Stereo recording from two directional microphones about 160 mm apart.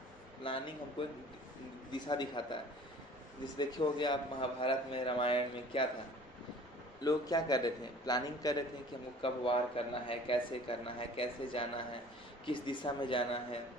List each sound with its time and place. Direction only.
0.4 s a man's voice: 35° left (ahead or behind)
1.9 s a man's voice: 30° left (ahead or behind)
7.1 s a man's voice: 25° left (ahead or behind)